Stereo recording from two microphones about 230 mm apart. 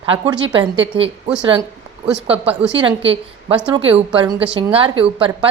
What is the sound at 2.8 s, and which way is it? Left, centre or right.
A woman's voice, right.